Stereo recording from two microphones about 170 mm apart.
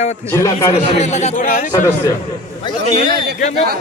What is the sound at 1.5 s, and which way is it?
Speech, 55° left (ahead or behind).